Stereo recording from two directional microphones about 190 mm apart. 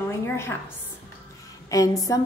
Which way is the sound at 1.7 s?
20° left (ahead or behind).